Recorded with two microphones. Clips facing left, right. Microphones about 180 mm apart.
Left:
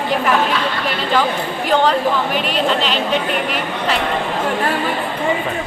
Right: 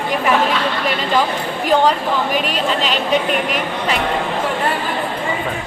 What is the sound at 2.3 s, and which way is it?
Speech, 45° right (ahead or behind).